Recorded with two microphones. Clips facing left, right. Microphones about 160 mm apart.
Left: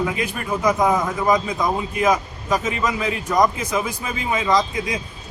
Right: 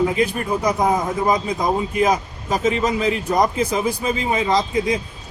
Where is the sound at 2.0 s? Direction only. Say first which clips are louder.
Left 2 dB; 30° right (ahead or behind).